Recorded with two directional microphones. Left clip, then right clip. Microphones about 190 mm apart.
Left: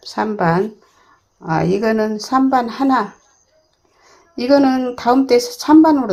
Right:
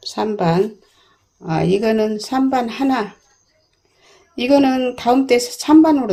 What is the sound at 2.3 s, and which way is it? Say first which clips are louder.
Speech: left 4 dB; 25° right (ahead or behind).